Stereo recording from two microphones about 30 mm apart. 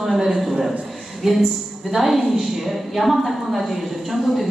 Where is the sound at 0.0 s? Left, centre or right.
Centre.